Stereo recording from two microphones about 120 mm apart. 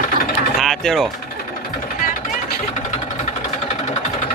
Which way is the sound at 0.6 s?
5° left (ahead or behind).